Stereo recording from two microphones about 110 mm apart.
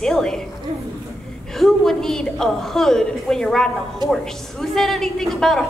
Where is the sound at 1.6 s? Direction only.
5° left (ahead or behind).